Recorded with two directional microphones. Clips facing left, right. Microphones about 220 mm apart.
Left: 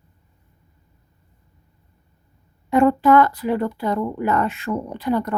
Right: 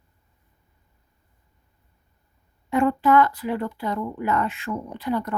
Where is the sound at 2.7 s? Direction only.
40° left (ahead or behind).